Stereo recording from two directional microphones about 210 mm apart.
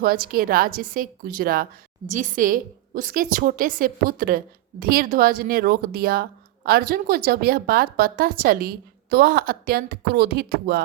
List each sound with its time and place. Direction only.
0.0 s a woman's voice: 45° right (ahead or behind)